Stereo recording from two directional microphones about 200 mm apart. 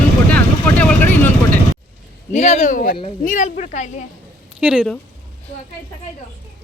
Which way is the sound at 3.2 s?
40° left (ahead or behind).